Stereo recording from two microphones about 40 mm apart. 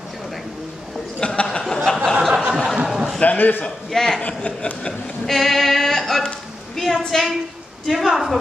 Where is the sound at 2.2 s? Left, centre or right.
Centre.